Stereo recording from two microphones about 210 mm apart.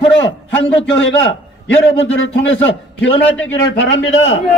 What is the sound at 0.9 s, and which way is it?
Speech, 65° left (ahead or behind).